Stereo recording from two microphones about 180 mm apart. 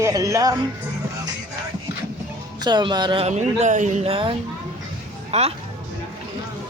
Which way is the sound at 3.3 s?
40° right (ahead or behind).